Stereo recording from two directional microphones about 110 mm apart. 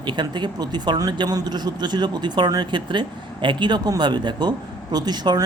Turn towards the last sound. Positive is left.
turn(degrees=-40)  # may be behind; listen again after turning